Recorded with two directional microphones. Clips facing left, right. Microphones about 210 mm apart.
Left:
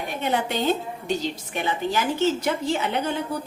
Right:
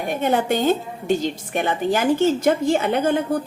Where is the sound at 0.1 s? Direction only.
50° right (ahead or behind).